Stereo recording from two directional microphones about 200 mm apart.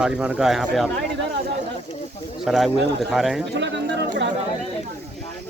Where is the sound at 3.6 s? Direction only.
60° right (ahead or behind).